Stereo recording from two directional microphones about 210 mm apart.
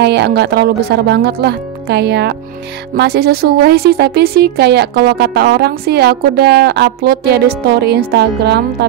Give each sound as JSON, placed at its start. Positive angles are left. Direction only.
{"t": 0.0, "sound": "speech", "side_deg": -50}